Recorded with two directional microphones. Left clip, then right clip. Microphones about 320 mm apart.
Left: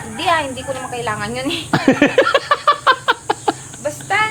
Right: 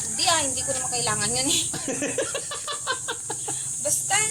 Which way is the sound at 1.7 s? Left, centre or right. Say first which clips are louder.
Left 15 dB; left.